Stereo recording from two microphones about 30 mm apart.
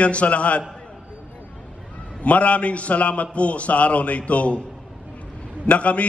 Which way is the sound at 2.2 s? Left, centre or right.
Left.